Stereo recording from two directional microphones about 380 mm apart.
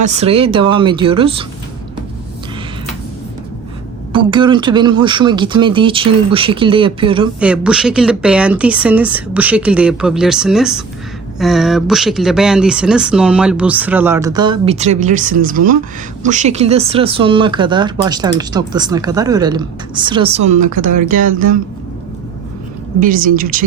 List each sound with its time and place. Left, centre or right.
0.1 s speech: centre
4.1 s speech: centre
7.3 s speech: centre; by 21.5 s right
23.0 s speech: right